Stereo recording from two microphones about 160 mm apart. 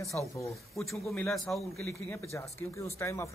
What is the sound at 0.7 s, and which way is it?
Speech, centre (ahead or behind).